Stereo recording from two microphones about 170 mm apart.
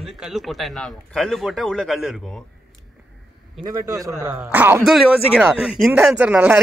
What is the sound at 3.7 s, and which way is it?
A man's voice, 20° right (ahead or behind).